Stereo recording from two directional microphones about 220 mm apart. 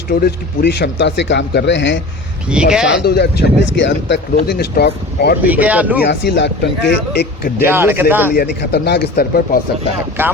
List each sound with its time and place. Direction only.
0.1 s speech: 45° left (ahead or behind)
2.5 s speech: 5° right (ahead or behind)
2.9 s speech: 50° left (ahead or behind)
5.4 s speech: 5° right (ahead or behind)
6.0 s speech: 50° left (ahead or behind)
7.6 s speech: 10° right (ahead or behind)
8.3 s speech: 45° left (ahead or behind)
10.2 s speech: 10° right (ahead or behind)